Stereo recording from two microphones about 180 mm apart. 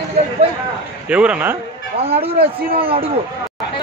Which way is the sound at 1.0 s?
5° right (ahead or behind).